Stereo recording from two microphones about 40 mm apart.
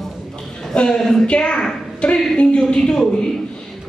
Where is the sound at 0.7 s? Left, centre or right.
Left.